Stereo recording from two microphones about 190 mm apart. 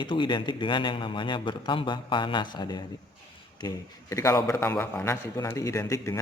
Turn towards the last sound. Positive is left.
turn(degrees=15)  # may be behind; listen again after turning